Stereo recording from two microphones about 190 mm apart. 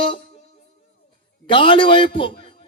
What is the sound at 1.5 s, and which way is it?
Speech, 25° left (ahead or behind).